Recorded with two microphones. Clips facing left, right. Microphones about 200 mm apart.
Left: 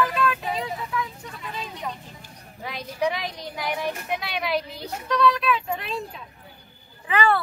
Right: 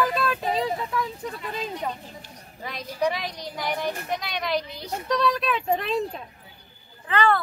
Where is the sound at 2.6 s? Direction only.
Centre (ahead or behind).